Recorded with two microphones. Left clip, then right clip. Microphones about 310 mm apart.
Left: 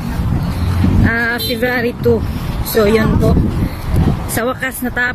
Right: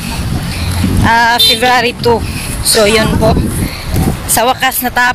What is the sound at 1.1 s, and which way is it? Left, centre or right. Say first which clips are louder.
Speech: right 11 dB; centre.